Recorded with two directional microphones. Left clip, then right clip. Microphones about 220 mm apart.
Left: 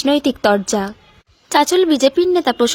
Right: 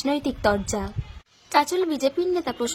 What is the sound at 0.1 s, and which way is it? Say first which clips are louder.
A woman's voice: left 8 dB; 30° left (ahead or behind).